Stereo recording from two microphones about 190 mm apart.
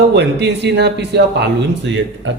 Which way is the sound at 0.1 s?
60° right (ahead or behind).